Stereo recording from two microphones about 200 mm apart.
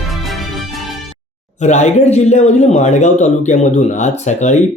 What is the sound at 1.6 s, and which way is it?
A man's voice, 35° left (ahead or behind).